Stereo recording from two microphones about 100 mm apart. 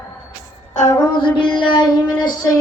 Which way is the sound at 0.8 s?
25° left (ahead or behind).